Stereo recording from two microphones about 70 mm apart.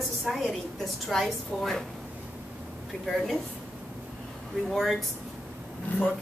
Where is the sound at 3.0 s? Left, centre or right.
Centre.